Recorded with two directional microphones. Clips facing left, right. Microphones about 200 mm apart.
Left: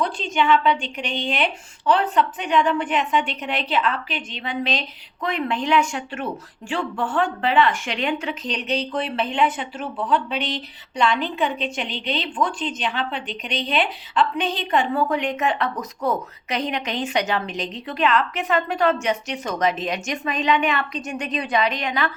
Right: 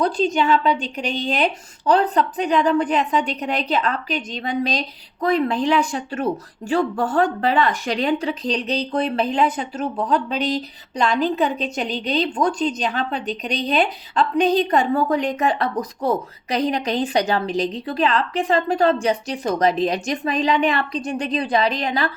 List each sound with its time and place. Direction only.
0.0 s speech: 40° right (ahead or behind)